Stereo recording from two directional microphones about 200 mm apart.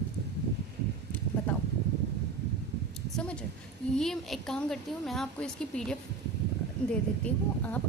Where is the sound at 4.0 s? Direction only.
Centre (ahead or behind).